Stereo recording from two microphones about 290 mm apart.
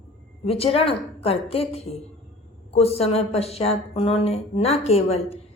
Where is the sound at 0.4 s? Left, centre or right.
Centre.